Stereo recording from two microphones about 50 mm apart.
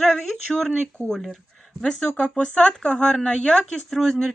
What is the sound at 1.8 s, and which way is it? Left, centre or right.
Speech, left.